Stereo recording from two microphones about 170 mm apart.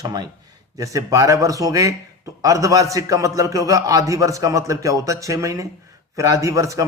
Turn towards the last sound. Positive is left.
turn(degrees=-20)  # may be behind; listen again after turning